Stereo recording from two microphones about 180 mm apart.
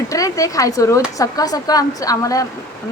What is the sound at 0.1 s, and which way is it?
Speech, 20° left (ahead or behind).